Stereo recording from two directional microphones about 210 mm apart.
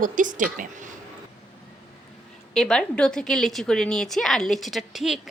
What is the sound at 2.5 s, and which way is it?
Speech, 5° left (ahead or behind).